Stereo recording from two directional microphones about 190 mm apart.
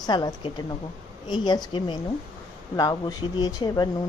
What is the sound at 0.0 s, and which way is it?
Speech, 20° left (ahead or behind).